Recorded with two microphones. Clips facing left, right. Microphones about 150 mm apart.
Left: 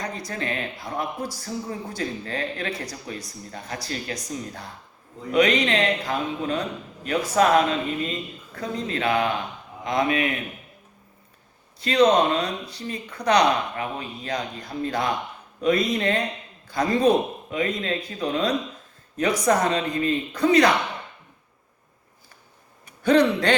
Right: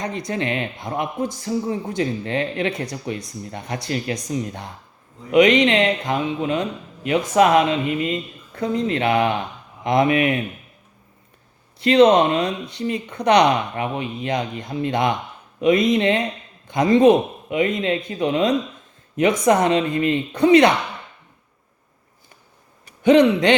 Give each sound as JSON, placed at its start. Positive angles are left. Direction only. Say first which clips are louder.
{"t": 0.0, "sound": "a man's voice", "louder": "right 5 dB", "side_deg": -20}
{"t": 11.8, "sound": "a man's voice", "louder": "right 5 dB", "side_deg": -25}
{"t": 23.0, "sound": "speech", "louder": "right 5 dB", "side_deg": -20}